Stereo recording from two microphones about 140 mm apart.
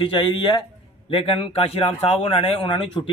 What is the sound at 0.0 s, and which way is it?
A man's voice, 35° left (ahead or behind).